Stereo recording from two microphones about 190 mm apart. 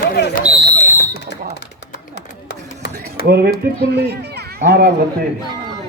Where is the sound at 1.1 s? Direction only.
60° left (ahead or behind).